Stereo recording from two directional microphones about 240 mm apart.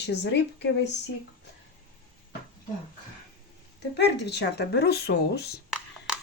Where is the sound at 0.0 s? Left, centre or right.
Left.